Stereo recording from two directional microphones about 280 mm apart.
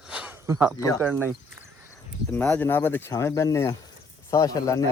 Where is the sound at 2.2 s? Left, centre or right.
Centre.